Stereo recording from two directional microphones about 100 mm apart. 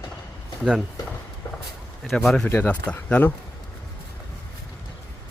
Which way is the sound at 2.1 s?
5° left (ahead or behind).